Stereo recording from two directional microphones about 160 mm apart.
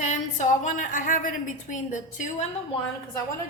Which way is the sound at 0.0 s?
50° left (ahead or behind).